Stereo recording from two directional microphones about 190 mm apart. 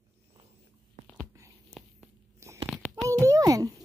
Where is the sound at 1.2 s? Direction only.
15° right (ahead or behind).